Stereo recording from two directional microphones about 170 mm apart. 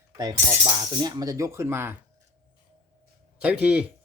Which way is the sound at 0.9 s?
25° right (ahead or behind).